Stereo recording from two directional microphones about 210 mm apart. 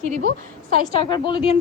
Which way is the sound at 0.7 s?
25° left (ahead or behind).